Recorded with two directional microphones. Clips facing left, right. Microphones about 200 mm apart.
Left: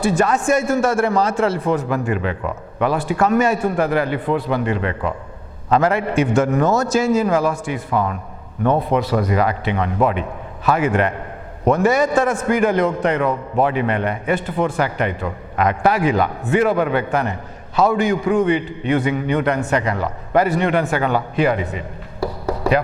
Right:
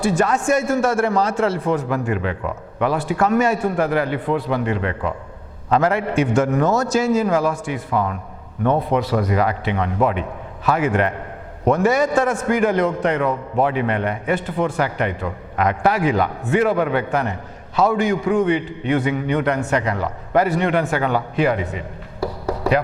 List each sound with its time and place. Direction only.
0.0 s a man's voice: 10° left (ahead or behind)
7.9 s a man's voice: 20° left (ahead or behind)